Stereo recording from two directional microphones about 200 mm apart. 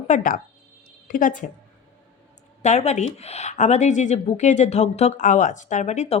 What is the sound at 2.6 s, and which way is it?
Speech, 35° left (ahead or behind).